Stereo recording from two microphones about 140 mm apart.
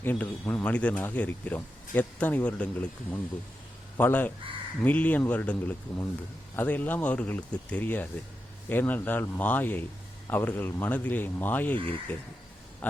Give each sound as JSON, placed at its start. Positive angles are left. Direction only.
{"t": 0.0, "sound": "speech", "side_deg": 15}